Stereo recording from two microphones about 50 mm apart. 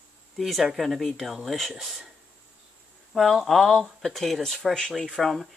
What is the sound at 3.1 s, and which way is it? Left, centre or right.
Speech, centre.